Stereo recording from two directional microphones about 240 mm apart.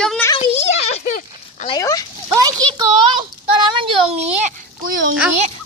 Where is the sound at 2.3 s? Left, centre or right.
Centre.